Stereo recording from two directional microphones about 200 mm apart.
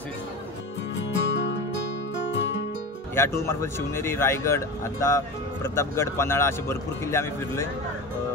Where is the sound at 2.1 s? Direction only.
60° left (ahead or behind).